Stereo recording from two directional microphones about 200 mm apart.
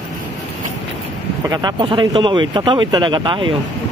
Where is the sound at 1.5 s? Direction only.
20° right (ahead or behind).